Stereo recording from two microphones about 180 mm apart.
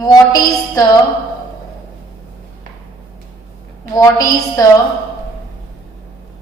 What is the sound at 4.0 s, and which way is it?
Speech, 20° left (ahead or behind).